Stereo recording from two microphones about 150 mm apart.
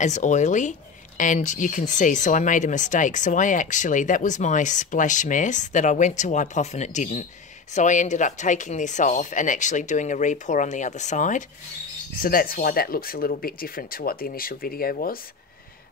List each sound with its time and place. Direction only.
0.0 s speech: 50° left (ahead or behind)
12.2 s speech: 75° left (ahead or behind)